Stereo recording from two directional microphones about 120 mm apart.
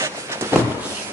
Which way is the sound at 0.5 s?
20° right (ahead or behind).